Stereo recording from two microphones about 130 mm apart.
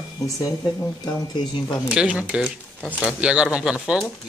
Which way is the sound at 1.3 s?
35° left (ahead or behind).